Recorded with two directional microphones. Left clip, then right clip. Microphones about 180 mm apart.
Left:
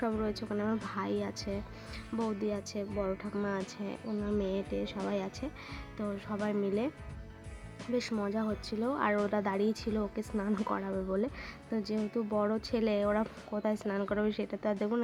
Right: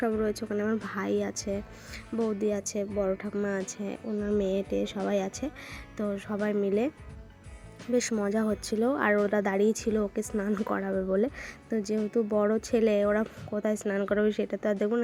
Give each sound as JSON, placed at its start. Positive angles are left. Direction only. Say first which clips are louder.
{"t": 0.2, "sound": "speech", "louder": "right 5 dB", "side_deg": -15}
{"t": 7.9, "sound": "speech", "louder": "right 6 dB", "side_deg": -20}